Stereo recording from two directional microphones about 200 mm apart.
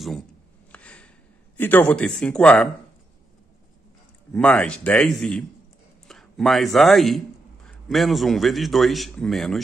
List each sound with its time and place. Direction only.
0.7 s a sound: 5° left (ahead or behind)
1.6 s a man's voice: 10° left (ahead or behind)
4.3 s a man's voice: 5° left (ahead or behind)